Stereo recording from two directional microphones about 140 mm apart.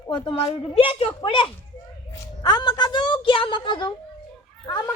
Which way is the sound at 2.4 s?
30° left (ahead or behind).